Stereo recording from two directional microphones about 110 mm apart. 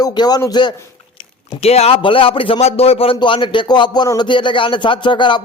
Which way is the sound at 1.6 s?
70° left (ahead or behind).